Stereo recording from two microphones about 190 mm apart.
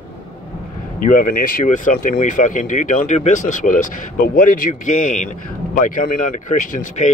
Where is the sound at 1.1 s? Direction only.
45° left (ahead or behind).